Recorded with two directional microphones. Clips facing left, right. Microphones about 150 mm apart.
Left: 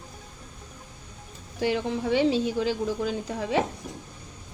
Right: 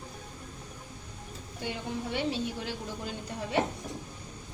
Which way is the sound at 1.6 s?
90° left.